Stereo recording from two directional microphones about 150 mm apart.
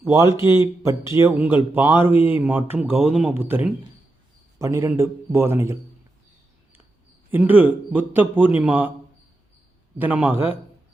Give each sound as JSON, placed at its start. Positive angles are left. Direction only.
{"t": 0.0, "sound": "a man's voice", "side_deg": -20}
{"t": 7.3, "sound": "a man's voice", "side_deg": -10}
{"t": 10.0, "sound": "a man's voice", "side_deg": -10}